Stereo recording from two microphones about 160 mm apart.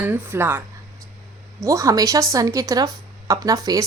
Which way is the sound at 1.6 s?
20° right (ahead or behind).